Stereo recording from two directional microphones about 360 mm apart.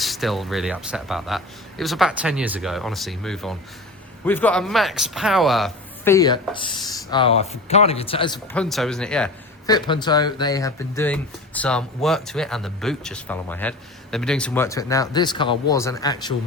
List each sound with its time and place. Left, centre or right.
0.0 s speech: centre
8.5 s speech: centre